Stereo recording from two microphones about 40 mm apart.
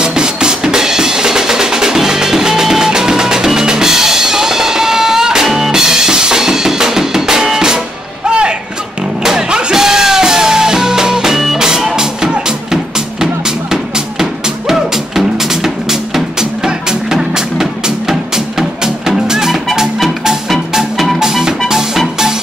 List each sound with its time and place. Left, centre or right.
0.0 s music: centre
8.3 s music: right
21.2 s music: centre